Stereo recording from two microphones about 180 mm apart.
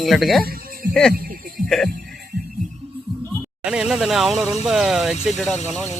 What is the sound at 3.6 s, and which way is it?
Speech, 5° right (ahead or behind).